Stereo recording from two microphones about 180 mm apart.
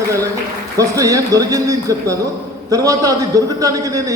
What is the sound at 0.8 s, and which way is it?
A man's voice, 20° right (ahead or behind).